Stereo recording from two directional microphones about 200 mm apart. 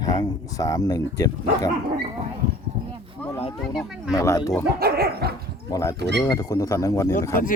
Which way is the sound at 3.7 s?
Centre (ahead or behind).